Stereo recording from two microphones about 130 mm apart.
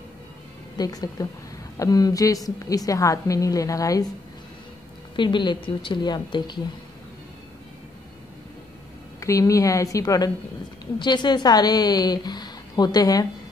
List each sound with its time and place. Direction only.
0.7 s a woman's voice: 30° left (ahead or behind)
5.1 s a woman's voice: 40° left (ahead or behind)
9.2 s a woman's voice: 25° left (ahead or behind)